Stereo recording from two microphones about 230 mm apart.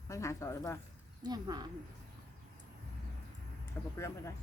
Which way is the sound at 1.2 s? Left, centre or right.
Centre.